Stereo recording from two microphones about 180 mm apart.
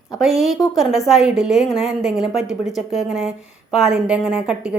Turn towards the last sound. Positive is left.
turn(degrees=-5)  # may be behind; listen again after turning